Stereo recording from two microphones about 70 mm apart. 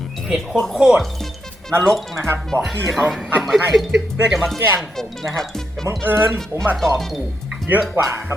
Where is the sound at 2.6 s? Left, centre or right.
Centre.